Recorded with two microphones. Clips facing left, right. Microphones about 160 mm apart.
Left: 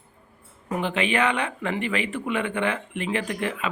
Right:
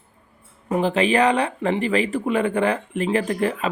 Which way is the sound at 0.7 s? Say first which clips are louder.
Right 6 dB; 35° right (ahead or behind).